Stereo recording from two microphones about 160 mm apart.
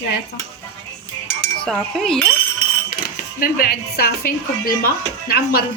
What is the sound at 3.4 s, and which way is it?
Speech, 65° left (ahead or behind).